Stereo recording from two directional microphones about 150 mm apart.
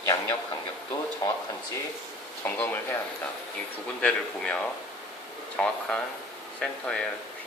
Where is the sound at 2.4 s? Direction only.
15° left (ahead or behind).